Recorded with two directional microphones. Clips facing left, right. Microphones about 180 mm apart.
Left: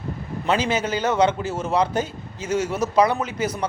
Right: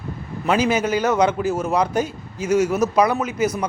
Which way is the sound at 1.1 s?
25° left (ahead or behind).